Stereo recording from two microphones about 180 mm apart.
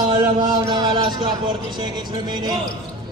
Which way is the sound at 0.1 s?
25° right (ahead or behind).